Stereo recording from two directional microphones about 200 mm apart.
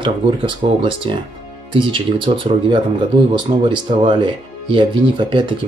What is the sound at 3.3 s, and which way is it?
Speech, 25° right (ahead or behind).